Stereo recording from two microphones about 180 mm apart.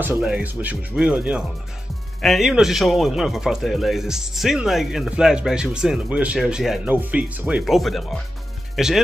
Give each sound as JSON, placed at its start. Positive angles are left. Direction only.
{"t": 0.0, "sound": "speech", "side_deg": -10}